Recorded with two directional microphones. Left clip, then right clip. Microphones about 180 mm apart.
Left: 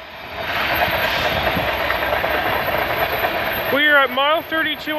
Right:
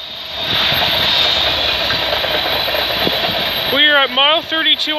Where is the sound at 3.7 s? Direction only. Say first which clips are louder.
Right 2 dB; 10° right (ahead or behind).